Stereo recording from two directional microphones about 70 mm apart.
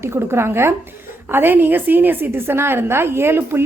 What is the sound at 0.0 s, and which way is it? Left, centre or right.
A woman's voice, right.